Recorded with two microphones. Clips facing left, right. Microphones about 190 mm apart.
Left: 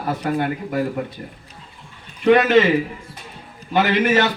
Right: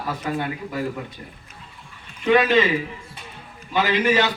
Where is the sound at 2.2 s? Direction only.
65° left (ahead or behind).